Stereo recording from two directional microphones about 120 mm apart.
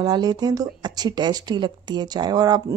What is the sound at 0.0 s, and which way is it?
Speech, 35° right (ahead or behind).